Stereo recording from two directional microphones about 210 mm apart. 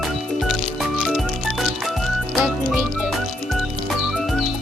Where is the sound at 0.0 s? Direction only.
Centre (ahead or behind).